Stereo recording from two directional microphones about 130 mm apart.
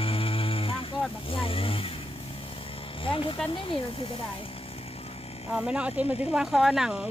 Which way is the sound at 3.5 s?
40° left (ahead or behind).